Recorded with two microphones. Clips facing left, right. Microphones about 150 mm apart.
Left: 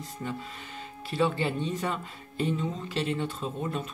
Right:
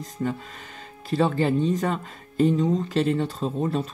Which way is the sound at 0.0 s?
45° right (ahead or behind).